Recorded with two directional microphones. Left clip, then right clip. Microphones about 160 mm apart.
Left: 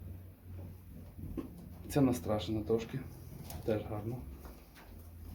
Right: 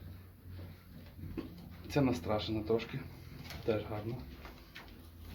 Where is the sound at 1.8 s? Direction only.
5° left (ahead or behind).